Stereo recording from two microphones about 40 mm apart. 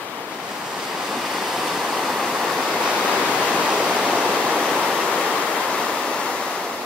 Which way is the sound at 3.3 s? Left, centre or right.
Right.